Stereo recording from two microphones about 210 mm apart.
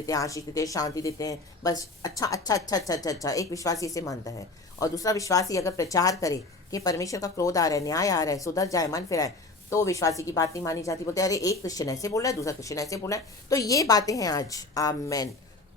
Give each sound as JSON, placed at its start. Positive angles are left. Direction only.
{"t": 0.0, "sound": "a woman's voice", "side_deg": 15}